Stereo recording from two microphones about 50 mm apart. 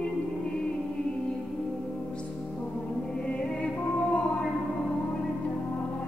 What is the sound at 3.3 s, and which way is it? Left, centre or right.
Music, left.